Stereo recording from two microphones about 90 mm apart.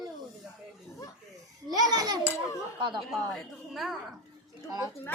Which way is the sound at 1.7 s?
45° right (ahead or behind).